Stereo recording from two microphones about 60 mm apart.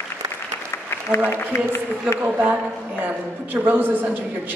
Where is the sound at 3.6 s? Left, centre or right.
Right.